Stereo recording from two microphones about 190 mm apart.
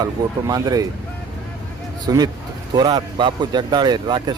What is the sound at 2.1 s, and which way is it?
Speech, 20° right (ahead or behind).